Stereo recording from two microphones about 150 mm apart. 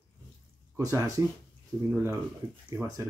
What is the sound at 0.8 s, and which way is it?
Speech, 20° right (ahead or behind).